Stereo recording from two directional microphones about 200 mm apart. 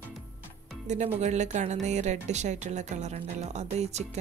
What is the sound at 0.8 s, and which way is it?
Speech, 35° right (ahead or behind).